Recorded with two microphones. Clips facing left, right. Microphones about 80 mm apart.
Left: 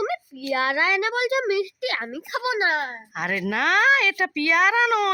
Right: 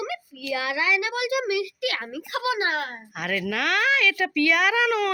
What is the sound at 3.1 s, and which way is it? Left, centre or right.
Speech, left.